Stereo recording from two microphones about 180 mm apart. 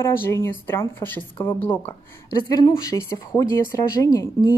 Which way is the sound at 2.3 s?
20° left (ahead or behind).